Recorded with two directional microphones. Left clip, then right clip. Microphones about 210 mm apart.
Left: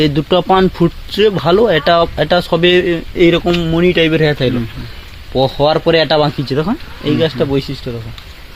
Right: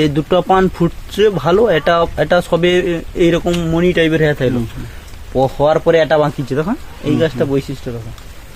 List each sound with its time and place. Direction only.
0.0 s speech: 20° left (ahead or behind)
5.3 s speech: 45° left (ahead or behind)